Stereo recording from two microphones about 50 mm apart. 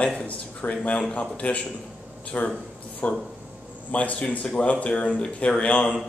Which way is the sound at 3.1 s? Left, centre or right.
Right.